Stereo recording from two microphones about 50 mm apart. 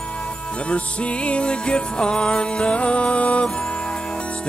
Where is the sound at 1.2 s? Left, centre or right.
Left.